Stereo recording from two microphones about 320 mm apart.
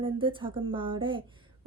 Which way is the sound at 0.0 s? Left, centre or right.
Centre.